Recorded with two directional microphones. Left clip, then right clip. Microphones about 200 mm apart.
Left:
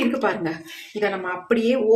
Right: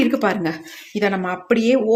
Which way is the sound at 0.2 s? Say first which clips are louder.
Right 3 dB; 40° right (ahead or behind).